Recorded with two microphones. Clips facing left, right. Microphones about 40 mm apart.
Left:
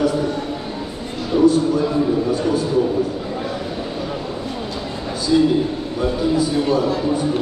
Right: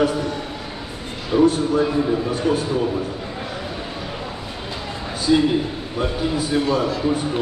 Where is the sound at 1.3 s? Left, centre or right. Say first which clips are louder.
Left 1 dB; centre.